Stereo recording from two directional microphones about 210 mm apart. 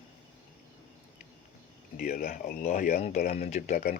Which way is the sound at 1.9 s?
45° left (ahead or behind).